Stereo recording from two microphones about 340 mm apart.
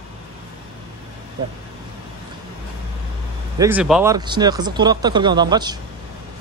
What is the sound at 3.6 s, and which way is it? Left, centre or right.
Speech, centre.